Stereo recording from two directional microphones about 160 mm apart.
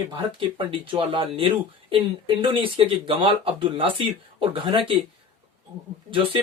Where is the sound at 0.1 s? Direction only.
30° right (ahead or behind).